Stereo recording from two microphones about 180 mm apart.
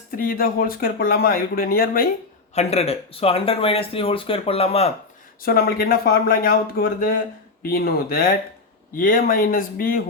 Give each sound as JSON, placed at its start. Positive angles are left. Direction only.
{"t": 0.2, "sound": "speech", "side_deg": 55}
{"t": 2.6, "sound": "speech", "side_deg": 35}
{"t": 5.4, "sound": "speech", "side_deg": 55}